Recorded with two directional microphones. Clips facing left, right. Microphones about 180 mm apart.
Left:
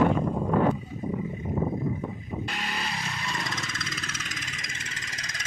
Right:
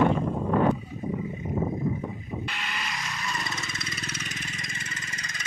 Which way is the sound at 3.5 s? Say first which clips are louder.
Left 1 dB; 90° left.